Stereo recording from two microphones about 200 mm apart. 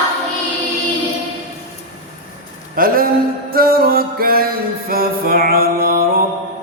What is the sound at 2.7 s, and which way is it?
Speech, 45° right (ahead or behind).